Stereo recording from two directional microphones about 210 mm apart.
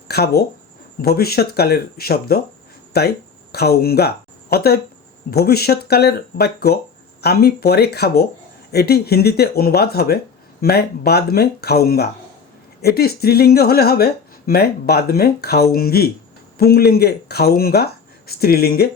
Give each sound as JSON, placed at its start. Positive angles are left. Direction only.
{"t": 0.1, "sound": "speech", "side_deg": 50}